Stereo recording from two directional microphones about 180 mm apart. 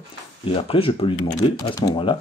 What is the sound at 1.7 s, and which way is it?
Speech, 20° left (ahead or behind).